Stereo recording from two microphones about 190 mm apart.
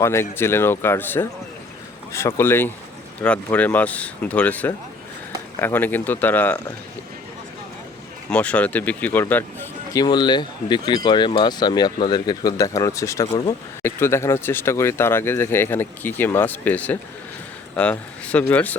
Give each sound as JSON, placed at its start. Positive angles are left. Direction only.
{"t": 0.0, "sound": "speech", "side_deg": 15}
{"t": 8.3, "sound": "speech", "side_deg": 5}
{"t": 13.3, "sound": "speech", "side_deg": 30}
{"t": 13.8, "sound": "speech", "side_deg": 15}